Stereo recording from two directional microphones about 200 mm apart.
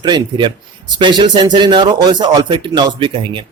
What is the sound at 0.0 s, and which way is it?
Speech, 25° right (ahead or behind).